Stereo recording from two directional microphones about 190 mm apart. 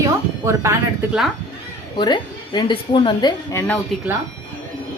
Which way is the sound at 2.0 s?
25° left (ahead or behind).